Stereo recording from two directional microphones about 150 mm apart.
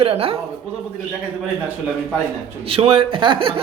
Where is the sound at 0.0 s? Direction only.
40° right (ahead or behind).